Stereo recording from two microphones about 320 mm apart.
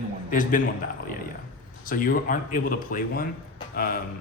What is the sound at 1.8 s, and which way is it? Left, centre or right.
Speech, left.